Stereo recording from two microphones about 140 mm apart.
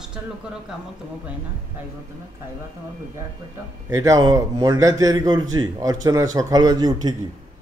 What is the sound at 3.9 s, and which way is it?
A man's voice, 25° right (ahead or behind).